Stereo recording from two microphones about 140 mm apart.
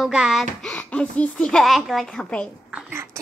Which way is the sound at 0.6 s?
10° left (ahead or behind).